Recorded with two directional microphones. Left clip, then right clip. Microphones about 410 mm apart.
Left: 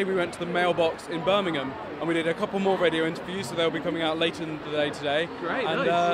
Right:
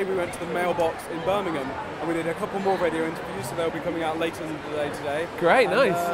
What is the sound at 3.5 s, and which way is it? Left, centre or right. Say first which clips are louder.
Speech: left 1 dB; left.